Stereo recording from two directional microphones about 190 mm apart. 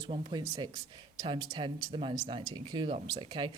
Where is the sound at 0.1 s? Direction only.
25° right (ahead or behind).